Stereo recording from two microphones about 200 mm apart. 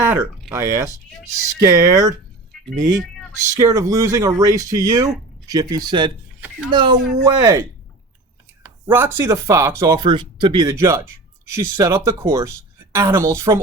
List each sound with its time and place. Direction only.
0.0 s a sound: 10° right (ahead or behind)
0.5 s speech: 15° right (ahead or behind)
8.6 s speech: 10° right (ahead or behind)